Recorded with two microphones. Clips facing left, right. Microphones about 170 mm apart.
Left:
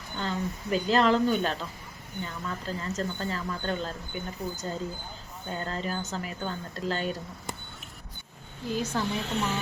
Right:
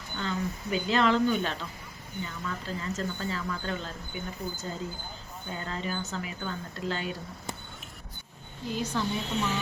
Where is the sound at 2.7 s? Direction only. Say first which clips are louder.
Left 2 dB; 35° left (ahead or behind).